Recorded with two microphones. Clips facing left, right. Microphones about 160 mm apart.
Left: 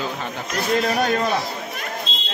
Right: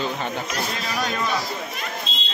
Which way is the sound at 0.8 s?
55° left (ahead or behind).